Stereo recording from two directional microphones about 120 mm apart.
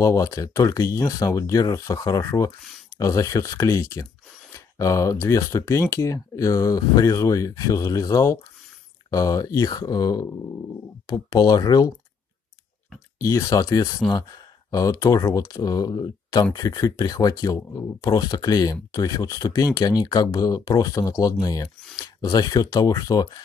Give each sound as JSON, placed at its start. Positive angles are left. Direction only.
{"t": 0.0, "sound": "speech", "side_deg": 25}
{"t": 13.2, "sound": "speech", "side_deg": 25}